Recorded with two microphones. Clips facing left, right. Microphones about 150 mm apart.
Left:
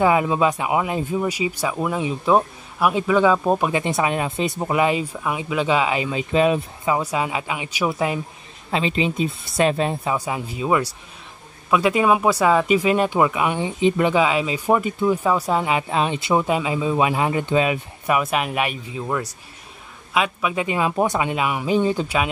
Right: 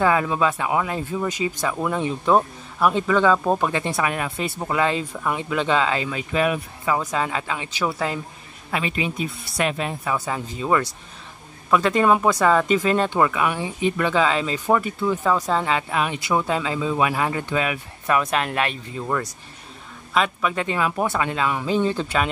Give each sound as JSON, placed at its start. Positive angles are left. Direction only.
{"t": 0.0, "sound": "speech", "side_deg": 20}
{"t": 7.0, "sound": "speech", "side_deg": 10}
{"t": 10.1, "sound": "speech", "side_deg": 15}
{"t": 15.9, "sound": "speech", "side_deg": 25}
{"t": 18.1, "sound": "speech", "side_deg": 10}